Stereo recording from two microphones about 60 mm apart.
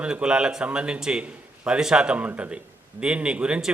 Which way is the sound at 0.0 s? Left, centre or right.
Centre.